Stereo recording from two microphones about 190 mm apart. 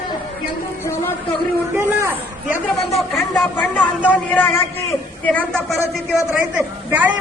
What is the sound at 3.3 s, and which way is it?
A man's voice, 10° left (ahead or behind).